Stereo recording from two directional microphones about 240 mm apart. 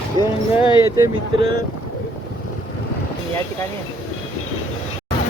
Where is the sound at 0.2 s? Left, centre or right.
Centre.